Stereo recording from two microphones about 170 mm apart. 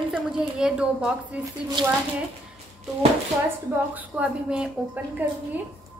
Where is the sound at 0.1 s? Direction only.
5° right (ahead or behind).